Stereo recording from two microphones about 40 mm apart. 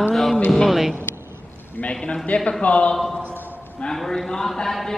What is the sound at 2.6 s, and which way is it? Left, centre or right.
Speech, left.